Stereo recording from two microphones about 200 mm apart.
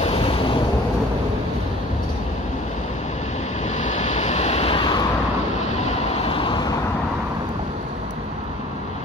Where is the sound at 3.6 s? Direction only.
35° left (ahead or behind).